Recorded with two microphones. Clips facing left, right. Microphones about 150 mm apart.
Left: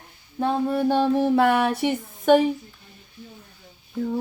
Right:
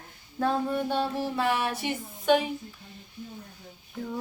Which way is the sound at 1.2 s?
60° left (ahead or behind).